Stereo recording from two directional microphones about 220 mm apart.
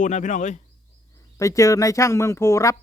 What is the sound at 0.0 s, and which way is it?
Speech, 35° left (ahead or behind).